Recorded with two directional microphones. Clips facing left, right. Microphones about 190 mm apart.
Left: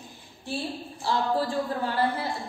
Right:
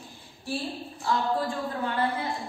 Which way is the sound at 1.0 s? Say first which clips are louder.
Left 1 dB; 35° left (ahead or behind).